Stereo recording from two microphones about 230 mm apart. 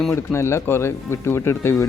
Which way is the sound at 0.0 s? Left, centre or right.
Centre.